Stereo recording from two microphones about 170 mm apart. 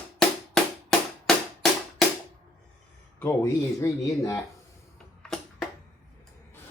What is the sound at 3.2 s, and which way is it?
Speech, 15° left (ahead or behind).